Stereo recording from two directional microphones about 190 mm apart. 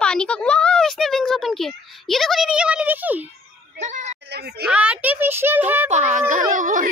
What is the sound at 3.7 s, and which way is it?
Speech, 40° right (ahead or behind).